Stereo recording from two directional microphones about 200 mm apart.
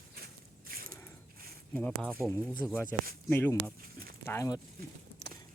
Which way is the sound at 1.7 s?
5° left (ahead or behind).